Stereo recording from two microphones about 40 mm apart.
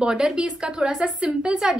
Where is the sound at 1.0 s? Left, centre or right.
Right.